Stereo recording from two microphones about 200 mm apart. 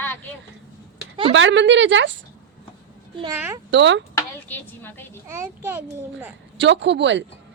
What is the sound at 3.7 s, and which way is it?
Speech, 65° right (ahead or behind).